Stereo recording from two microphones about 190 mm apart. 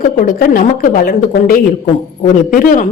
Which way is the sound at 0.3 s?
45° left (ahead or behind).